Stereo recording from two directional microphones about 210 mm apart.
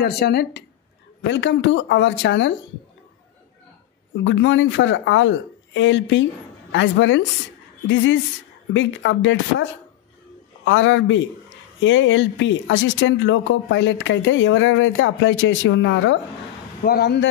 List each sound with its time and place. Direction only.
0.0 s speech: 50° left (ahead or behind)
4.2 s speech: 65° left (ahead or behind)
16.8 s speech: 50° left (ahead or behind)